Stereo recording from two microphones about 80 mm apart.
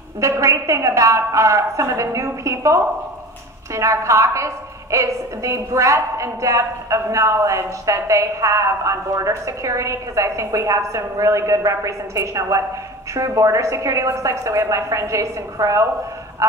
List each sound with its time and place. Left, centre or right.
0.2 s a woman's voice: right